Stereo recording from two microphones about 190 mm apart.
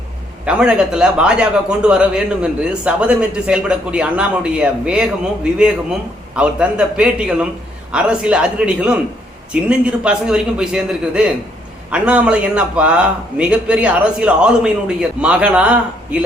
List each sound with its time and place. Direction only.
0.4 s a man's voice: 5° right (ahead or behind)
6.3 s a man's voice: 5° right (ahead or behind)